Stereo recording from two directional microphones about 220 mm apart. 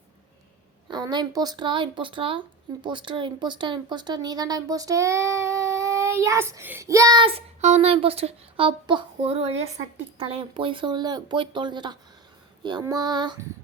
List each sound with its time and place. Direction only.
0.9 s speech: 20° right (ahead or behind)